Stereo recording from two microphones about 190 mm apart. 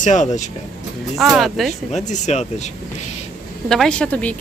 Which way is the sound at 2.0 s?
40° left (ahead or behind).